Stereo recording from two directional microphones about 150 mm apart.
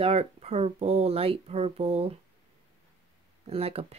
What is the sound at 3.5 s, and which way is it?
Speech, 40° right (ahead or behind).